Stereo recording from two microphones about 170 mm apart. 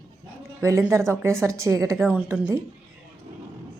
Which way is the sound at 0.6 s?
15° right (ahead or behind).